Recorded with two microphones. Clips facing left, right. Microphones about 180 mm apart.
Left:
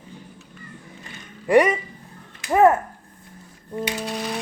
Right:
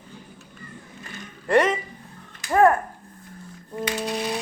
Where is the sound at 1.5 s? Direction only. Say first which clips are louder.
Left 3 dB; 15° left (ahead or behind).